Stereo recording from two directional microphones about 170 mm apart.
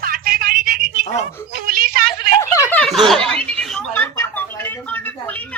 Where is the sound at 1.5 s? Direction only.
60° right (ahead or behind).